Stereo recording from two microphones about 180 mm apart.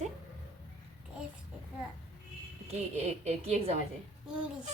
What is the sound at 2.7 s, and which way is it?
A woman's voice, 35° right (ahead or behind).